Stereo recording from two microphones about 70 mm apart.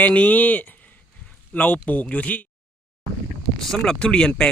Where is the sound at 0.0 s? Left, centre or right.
Left.